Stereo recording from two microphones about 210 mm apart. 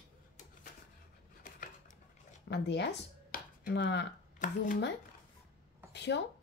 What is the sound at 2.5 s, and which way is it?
Speech, 55° left (ahead or behind).